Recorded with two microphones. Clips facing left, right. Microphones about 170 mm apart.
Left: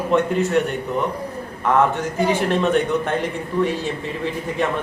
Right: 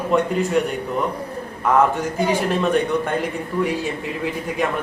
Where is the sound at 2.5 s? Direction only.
5° right (ahead or behind).